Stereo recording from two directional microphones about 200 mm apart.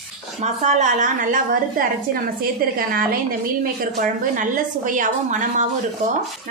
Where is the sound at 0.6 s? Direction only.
35° right (ahead or behind).